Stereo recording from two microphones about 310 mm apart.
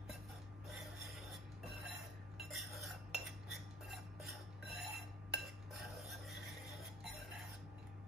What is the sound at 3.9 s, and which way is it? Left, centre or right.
Cutlery, centre.